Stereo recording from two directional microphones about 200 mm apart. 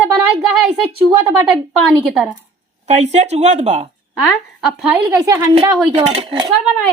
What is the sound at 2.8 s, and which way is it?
Speech, 35° right (ahead or behind).